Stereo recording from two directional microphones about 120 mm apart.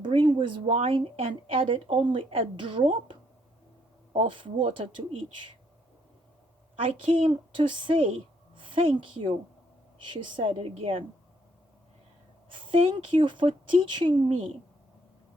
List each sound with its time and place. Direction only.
0.0 s a sound: 40° right (ahead or behind)
0.8 s speech: 55° right (ahead or behind)
6.8 s a woman's voice: 50° right (ahead or behind)
12.5 s speech: 50° right (ahead or behind)